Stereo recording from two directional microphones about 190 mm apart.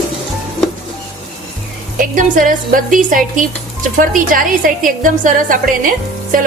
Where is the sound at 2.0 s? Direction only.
45° right (ahead or behind).